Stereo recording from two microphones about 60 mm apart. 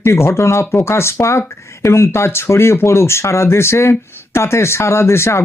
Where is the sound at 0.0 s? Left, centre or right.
Left.